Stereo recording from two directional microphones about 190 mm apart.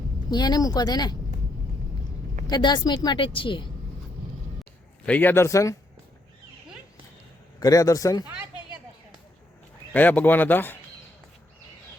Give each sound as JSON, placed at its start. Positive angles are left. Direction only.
{"t": 0.3, "sound": "speech", "side_deg": 20}
{"t": 2.5, "sound": "speech", "side_deg": 25}
{"t": 5.0, "sound": "speech", "side_deg": 10}
{"t": 7.6, "sound": "speech", "side_deg": 20}
{"t": 9.9, "sound": "speech", "side_deg": 10}